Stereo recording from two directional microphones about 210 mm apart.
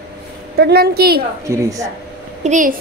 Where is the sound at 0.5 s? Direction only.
50° right (ahead or behind).